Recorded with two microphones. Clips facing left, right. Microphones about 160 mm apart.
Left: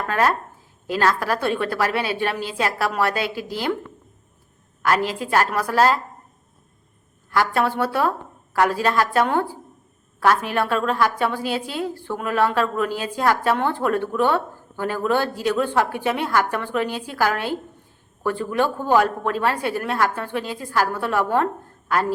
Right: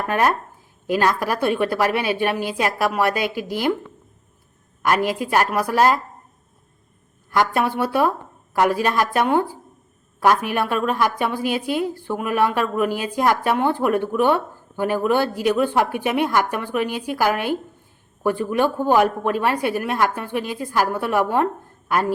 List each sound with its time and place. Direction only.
0.1 s a woman's voice: 20° right (ahead or behind)
4.8 s a woman's voice: 15° right (ahead or behind)
7.3 s a woman's voice: 15° right (ahead or behind)